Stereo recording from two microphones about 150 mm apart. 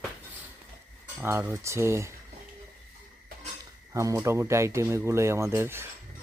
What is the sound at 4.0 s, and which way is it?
Speech, 20° right (ahead or behind).